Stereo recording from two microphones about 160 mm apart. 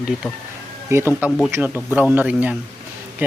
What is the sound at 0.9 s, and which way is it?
Speech, 15° right (ahead or behind).